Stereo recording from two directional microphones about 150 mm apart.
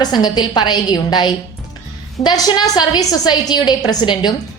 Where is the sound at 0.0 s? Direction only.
30° left (ahead or behind).